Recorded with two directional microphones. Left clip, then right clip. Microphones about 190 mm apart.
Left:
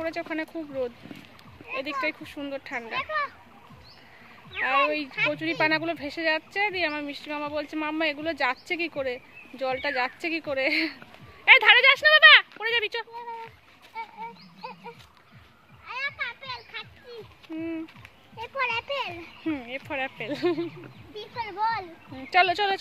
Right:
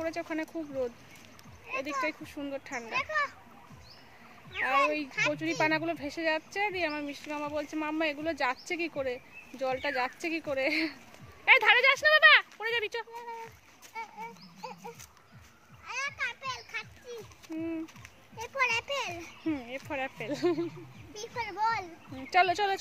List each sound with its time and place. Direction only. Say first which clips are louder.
0.0 s speech: left 4 dB; 5° left (ahead or behind)
3.0 s a child's voice: left 1 dB; 15° right (ahead or behind)
4.6 s speech: left 3 dB; centre (ahead or behind)
13.9 s a sound: left 4 dB; 20° right (ahead or behind)
15.9 s children playing: left 3 dB; 20° right (ahead or behind)
17.6 s speech: left 3 dB; 5° left (ahead or behind)
19.5 s speech: left 4 dB; 5° left (ahead or behind)
21.1 s a child's voice: left 2 dB; 15° right (ahead or behind)
22.1 s speech: left 4 dB; centre (ahead or behind)